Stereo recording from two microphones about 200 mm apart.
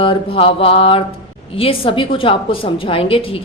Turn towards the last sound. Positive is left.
turn(degrees=25)  # may be behind; listen again after turning